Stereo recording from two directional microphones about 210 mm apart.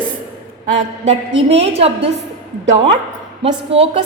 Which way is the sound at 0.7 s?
30° right (ahead or behind).